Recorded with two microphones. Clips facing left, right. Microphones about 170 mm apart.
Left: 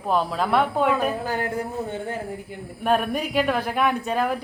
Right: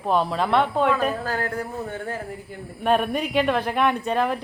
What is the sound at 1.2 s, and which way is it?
Speech, 20° left (ahead or behind).